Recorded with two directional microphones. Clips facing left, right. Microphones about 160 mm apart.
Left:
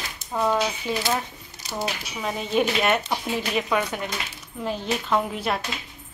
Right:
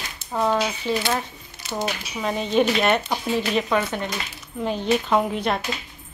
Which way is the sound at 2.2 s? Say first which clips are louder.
Right 3 dB; 5° left (ahead or behind).